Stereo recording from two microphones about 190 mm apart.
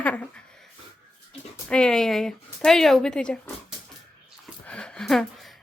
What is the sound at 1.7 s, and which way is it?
Speech, 5° left (ahead or behind).